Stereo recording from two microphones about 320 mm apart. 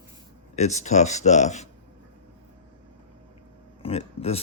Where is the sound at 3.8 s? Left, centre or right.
Centre.